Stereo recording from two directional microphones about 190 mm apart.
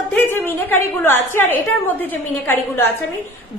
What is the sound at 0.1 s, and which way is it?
A woman's voice, 10° left (ahead or behind).